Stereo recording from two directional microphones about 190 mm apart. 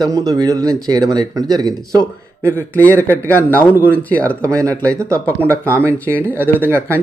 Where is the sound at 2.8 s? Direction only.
10° left (ahead or behind).